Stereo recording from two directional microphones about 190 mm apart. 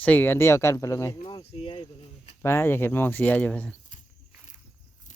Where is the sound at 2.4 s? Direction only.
15° left (ahead or behind).